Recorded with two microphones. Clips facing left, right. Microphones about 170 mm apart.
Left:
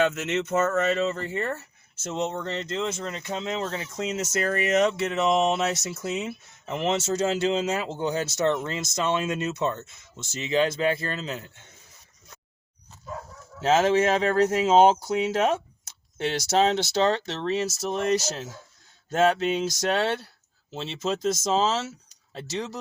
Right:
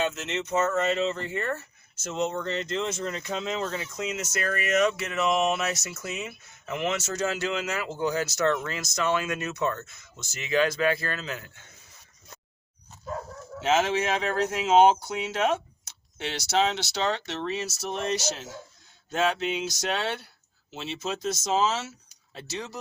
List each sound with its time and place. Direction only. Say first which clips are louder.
0.0 s speech: left 5 dB; 60° left (ahead or behind); by 11.6 s 25° left (ahead or behind)
13.6 s speech: left 4 dB; 35° left (ahead or behind)